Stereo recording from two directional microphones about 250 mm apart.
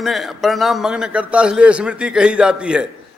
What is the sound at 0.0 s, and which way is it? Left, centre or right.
A man's voice, centre.